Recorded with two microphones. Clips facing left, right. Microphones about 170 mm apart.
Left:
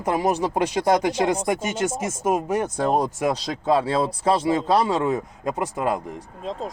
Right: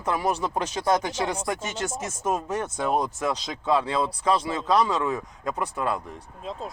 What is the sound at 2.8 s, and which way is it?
Speech, 40° left (ahead or behind).